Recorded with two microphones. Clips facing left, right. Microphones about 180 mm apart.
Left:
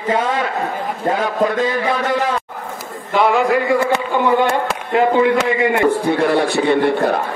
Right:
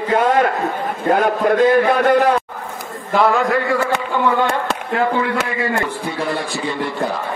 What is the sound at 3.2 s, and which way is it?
Speech, 15° left (ahead or behind).